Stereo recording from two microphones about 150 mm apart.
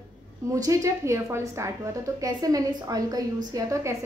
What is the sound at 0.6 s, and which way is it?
A woman's voice, 20° right (ahead or behind).